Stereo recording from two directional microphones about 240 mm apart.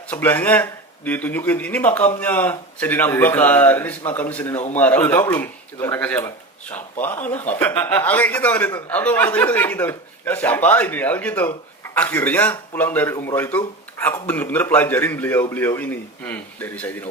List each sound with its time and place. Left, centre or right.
0.1 s a man's voice: centre